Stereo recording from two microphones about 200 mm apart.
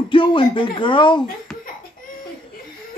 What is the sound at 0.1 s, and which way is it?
Speech, 25° left (ahead or behind).